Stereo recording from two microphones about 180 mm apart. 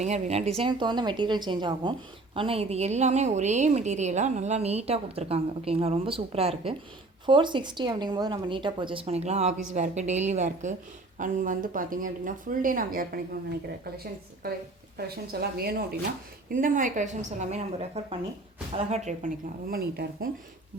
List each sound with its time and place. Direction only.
0.0 s a woman's voice: 35° right (ahead or behind); by 13.1 s 55° right (ahead or behind)
14.4 s speech: 60° right (ahead or behind)
16.5 s speech: 50° right (ahead or behind)
19.7 s speech: 60° right (ahead or behind)